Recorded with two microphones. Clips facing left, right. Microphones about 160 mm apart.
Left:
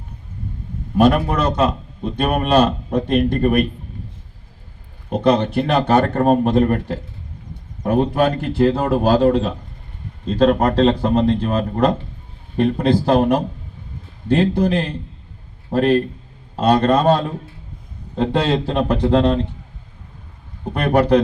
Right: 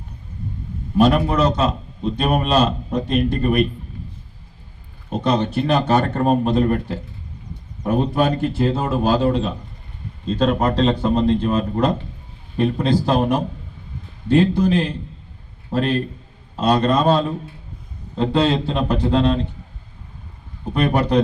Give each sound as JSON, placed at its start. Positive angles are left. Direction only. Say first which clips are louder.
{"t": 0.9, "sound": "a man's voice", "louder": "left 1 dB", "side_deg": 55}
{"t": 5.1, "sound": "a man's voice", "louder": "left 3 dB", "side_deg": 60}
{"t": 20.7, "sound": "a man's voice", "louder": "left 3 dB", "side_deg": 55}